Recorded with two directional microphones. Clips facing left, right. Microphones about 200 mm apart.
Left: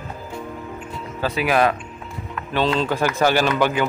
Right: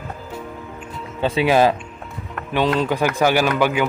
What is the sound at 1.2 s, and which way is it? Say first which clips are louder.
Speech: right 3 dB; 30° right (ahead or behind).